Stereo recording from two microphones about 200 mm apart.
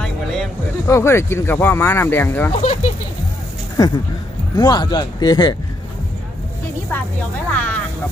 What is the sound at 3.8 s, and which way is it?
Speech, 20° left (ahead or behind).